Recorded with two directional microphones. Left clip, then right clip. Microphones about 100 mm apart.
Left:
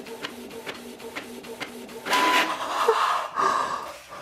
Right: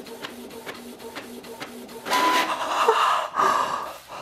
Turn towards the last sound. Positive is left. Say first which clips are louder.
# right 2 dB
turn(degrees=-35)  # may be behind; listen again after turning